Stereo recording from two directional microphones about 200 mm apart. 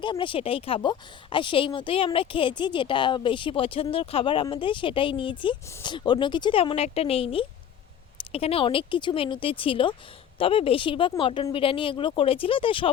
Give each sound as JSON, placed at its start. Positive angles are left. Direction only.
{"t": 0.0, "sound": "speech", "side_deg": 25}